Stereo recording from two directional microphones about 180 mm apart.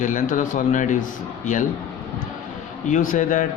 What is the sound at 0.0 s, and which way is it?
Speech, 45° left (ahead or behind).